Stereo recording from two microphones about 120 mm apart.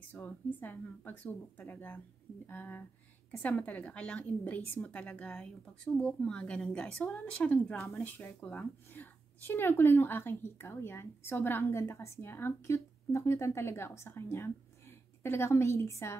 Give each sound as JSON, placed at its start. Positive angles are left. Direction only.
{"t": 0.1, "sound": "a woman's voice", "side_deg": 15}